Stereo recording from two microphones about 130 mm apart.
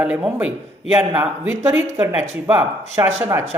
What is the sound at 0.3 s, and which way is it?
A woman's voice, 15° right (ahead or behind).